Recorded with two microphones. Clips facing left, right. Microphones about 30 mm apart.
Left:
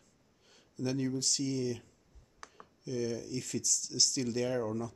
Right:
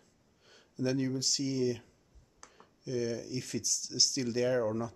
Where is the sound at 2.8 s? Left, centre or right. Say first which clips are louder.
Right 1 dB; centre.